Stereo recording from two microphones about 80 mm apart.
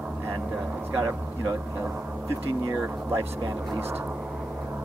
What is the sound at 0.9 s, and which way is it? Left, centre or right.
Speech, right.